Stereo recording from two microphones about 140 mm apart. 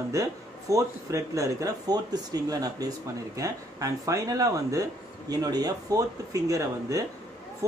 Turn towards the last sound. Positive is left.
turn(degrees=-25)  # may be behind; listen again after turning